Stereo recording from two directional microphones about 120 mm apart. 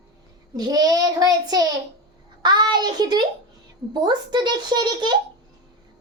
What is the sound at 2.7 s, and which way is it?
A child's voice, 35° right (ahead or behind).